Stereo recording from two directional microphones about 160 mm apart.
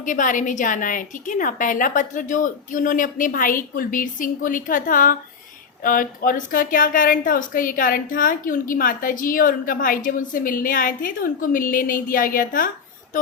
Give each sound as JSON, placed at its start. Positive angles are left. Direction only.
{"t": 0.0, "sound": "a woman's voice", "side_deg": 55}